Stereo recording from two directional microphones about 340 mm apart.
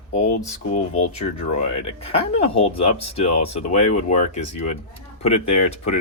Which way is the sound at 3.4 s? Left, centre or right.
Centre.